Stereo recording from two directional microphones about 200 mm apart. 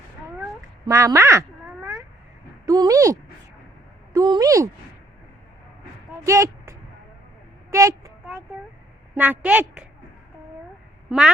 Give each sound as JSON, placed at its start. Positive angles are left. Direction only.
{"t": 0.9, "sound": "cat", "side_deg": -15}
{"t": 2.6, "sound": "a woman's voice", "side_deg": -15}
{"t": 6.2, "sound": "speech", "side_deg": -15}
{"t": 7.7, "sound": "a sound", "side_deg": -15}
{"t": 9.1, "sound": "a woman's voice", "side_deg": -10}